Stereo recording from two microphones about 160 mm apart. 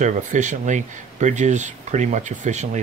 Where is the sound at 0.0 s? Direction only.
50° right (ahead or behind).